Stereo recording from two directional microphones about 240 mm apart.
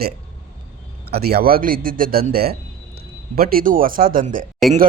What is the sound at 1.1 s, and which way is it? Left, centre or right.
A man's voice, right.